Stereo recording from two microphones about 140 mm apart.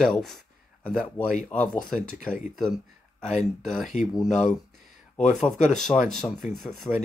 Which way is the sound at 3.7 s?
Centre (ahead or behind).